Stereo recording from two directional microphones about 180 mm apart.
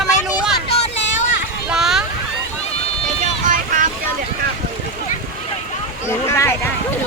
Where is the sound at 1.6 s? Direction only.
Centre (ahead or behind).